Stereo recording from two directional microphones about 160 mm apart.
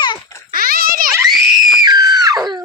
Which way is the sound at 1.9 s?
25° right (ahead or behind).